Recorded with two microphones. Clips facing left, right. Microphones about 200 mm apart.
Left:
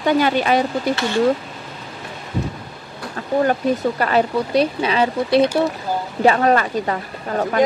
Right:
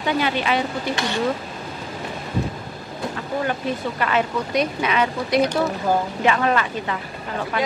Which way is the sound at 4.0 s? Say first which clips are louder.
Left 4 dB; 35° left (ahead or behind).